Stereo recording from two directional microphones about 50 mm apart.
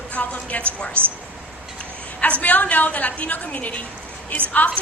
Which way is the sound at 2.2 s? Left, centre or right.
Left.